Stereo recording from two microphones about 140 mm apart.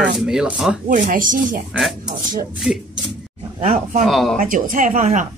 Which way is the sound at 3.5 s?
55° right (ahead or behind).